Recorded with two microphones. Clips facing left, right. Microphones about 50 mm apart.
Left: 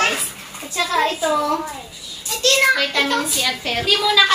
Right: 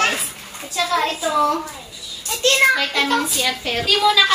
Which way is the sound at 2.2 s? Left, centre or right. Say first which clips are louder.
Right 1 dB; right.